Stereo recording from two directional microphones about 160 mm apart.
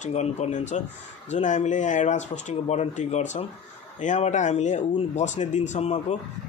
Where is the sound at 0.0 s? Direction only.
45° left (ahead or behind).